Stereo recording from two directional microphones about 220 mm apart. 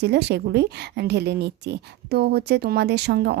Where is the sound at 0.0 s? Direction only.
50° right (ahead or behind).